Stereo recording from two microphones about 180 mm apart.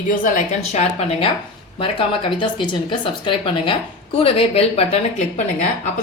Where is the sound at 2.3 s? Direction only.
25° left (ahead or behind).